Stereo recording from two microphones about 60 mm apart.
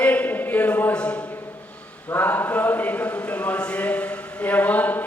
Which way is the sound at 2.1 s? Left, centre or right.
Left.